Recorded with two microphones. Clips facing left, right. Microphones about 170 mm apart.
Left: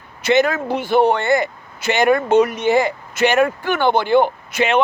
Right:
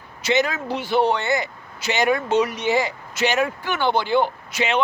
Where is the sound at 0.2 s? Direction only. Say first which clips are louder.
Left 5 dB; 55° left (ahead or behind).